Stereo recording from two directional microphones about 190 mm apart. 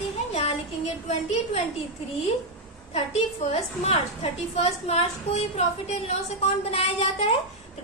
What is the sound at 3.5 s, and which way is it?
A woman's voice, 35° left (ahead or behind).